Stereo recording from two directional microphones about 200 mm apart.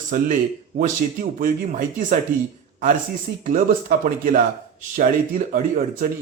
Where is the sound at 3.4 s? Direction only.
40° right (ahead or behind).